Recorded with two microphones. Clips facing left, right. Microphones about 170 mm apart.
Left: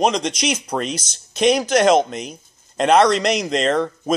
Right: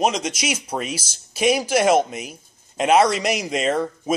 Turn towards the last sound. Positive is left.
turn(degrees=-5)  # may be behind; listen again after turning